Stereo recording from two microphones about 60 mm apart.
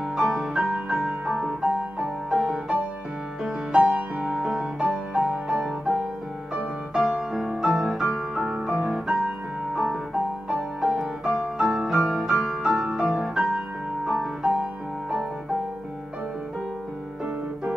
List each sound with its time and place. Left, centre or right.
0.0 s music: centre
2.3 s music: centre
4.7 s music: right; by 8.2 s centre
8.4 s music: centre
8.6 s music: centre
11.0 s music: centre